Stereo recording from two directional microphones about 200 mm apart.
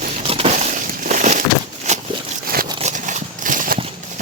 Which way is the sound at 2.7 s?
35° right (ahead or behind).